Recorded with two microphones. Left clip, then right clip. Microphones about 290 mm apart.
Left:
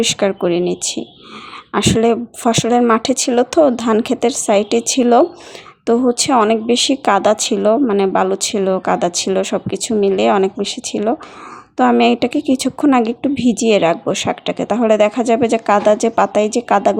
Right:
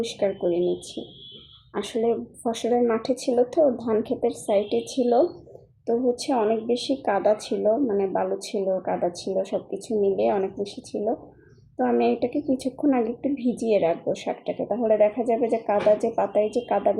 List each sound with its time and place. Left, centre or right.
0.0 s a woman's voice: left
1.7 s a woman's voice: left